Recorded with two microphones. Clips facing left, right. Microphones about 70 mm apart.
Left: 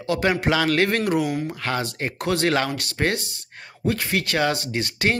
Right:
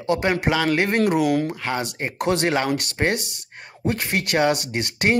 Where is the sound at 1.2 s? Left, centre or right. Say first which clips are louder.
Right 5 dB; right.